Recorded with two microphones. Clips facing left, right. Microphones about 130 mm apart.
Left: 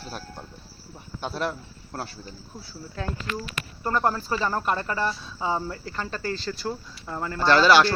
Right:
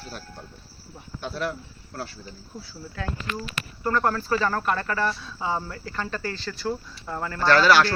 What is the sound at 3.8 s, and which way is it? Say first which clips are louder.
Speech: right 1 dB; 20° left (ahead or behind).